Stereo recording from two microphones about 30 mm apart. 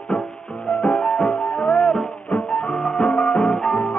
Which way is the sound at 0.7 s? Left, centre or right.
Left.